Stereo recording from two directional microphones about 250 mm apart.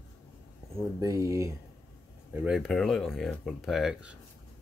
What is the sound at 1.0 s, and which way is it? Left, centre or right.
Speech, centre.